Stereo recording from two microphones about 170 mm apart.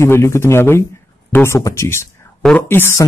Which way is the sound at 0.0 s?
15° left (ahead or behind).